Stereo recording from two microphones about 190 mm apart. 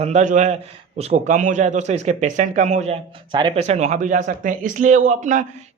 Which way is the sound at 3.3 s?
25° right (ahead or behind).